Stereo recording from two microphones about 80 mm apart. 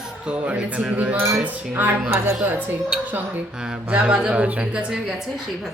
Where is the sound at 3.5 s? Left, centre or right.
Centre.